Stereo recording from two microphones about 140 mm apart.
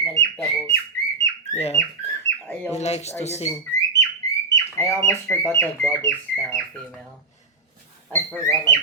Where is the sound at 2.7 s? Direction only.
50° left (ahead or behind).